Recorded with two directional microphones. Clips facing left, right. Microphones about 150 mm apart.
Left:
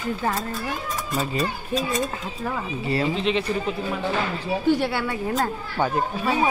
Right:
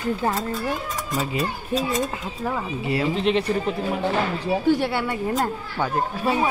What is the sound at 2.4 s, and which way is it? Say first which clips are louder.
Speech: right 1 dB; 10° right (ahead or behind).